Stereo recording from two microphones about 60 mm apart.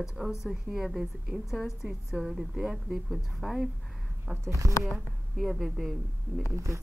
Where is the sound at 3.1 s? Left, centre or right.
Centre.